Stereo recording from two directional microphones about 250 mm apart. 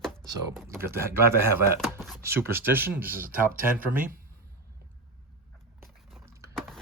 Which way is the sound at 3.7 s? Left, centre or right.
Right.